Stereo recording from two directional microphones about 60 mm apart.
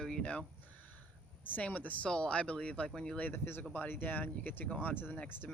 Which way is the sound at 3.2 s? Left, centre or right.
Left.